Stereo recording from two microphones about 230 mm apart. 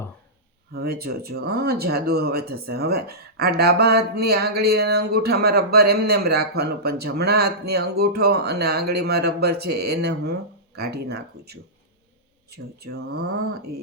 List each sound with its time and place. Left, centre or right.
0.7 s speech: right